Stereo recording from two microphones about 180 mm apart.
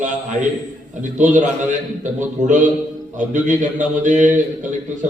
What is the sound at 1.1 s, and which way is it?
A man's voice, 45° right (ahead or behind).